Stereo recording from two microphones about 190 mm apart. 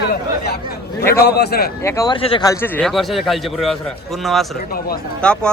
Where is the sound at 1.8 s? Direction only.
15° left (ahead or behind).